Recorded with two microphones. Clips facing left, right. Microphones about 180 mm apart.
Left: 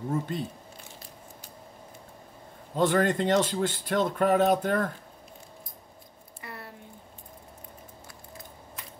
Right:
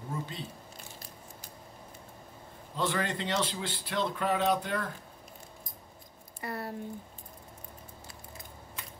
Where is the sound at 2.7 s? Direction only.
50° left (ahead or behind).